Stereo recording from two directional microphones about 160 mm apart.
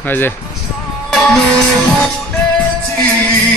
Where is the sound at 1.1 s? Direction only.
5° left (ahead or behind).